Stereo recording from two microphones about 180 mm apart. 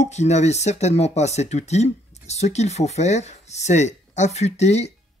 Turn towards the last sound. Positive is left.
turn(degrees=40)  # may be behind; listen again after turning